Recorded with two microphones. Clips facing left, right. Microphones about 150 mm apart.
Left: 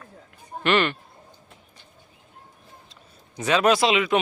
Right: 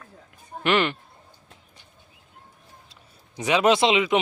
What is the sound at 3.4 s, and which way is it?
Speech, 15° right (ahead or behind).